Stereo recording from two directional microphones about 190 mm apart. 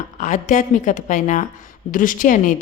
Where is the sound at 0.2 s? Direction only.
40° left (ahead or behind).